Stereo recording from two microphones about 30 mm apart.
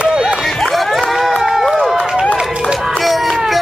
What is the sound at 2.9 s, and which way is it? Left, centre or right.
Run, centre.